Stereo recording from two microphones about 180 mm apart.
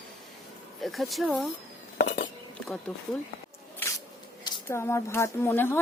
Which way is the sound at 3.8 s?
10° left (ahead or behind).